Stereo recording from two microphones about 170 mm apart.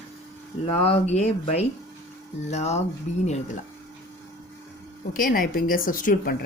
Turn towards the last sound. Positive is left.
turn(degrees=55)  # may be behind; listen again after turning